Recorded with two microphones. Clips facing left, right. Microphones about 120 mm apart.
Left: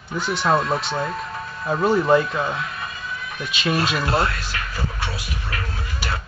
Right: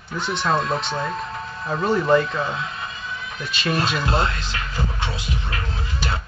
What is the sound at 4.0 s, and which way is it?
Speech, 25° right (ahead or behind).